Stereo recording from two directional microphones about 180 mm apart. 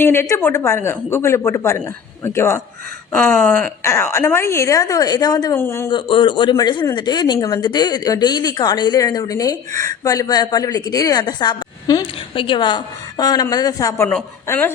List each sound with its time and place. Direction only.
0.0 s a woman's voice: 10° left (ahead or behind)
5.9 s a woman's voice: 25° left (ahead or behind); by 14.7 s 10° left (ahead or behind)